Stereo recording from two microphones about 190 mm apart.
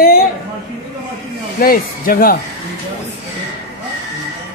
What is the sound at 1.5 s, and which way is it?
Speech, 50° left (ahead or behind).